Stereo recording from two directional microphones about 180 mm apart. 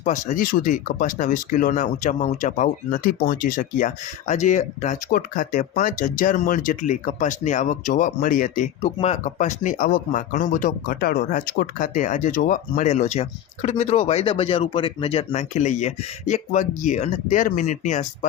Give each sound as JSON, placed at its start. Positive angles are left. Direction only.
{"t": 0.0, "sound": "speech", "side_deg": 45}